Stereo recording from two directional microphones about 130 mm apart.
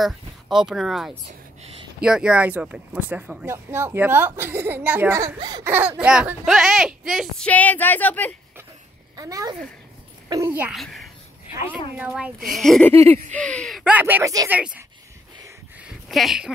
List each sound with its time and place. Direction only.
0.0 s a child's voice: 5° right (ahead or behind); by 5.3 s 20° right (ahead or behind)
5.4 s speech: 30° right (ahead or behind)
5.7 s speech: 10° right (ahead or behind)
7.4 s speech: 10° left (ahead or behind)
9.1 s a child's voice: 25° right (ahead or behind)
10.7 s speech: centre (ahead or behind)
13.9 s a child's voice: 15° right (ahead or behind)
14.2 s speech: 30° right (ahead or behind)
14.5 s a child's voice: 10° right (ahead or behind)
15.8 s a sound: centre (ahead or behind)